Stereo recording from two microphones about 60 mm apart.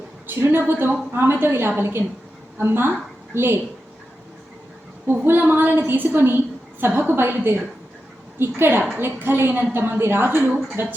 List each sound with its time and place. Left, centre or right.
0.3 s a woman's voice: right
5.2 s a woman's voice: right